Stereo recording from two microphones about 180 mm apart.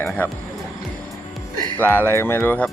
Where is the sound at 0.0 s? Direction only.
10° left (ahead or behind).